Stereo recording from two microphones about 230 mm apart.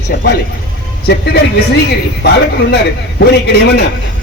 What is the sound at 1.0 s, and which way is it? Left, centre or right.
Speech, left.